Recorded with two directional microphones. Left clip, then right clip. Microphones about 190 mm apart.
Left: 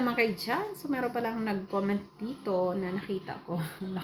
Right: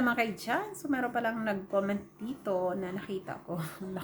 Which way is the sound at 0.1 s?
20° right (ahead or behind).